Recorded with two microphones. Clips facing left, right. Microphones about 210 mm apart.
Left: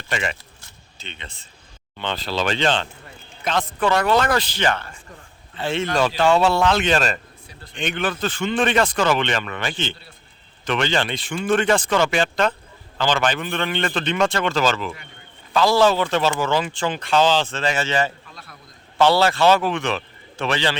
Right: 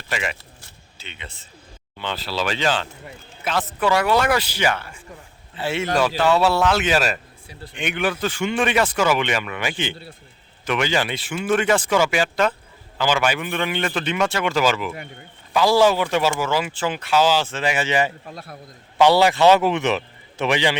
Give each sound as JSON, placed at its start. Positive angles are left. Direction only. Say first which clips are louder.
{"t": 0.1, "sound": "speech", "louder": "left 1 dB", "side_deg": -5}